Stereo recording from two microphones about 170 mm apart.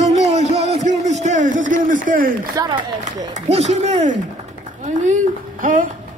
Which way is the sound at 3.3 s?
40° right (ahead or behind).